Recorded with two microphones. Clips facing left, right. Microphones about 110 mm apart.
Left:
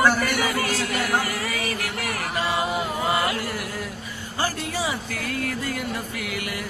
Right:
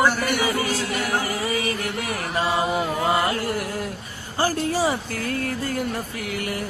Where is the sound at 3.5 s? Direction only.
45° right (ahead or behind).